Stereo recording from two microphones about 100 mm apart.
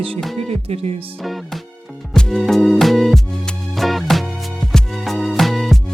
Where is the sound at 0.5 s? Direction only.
90° right.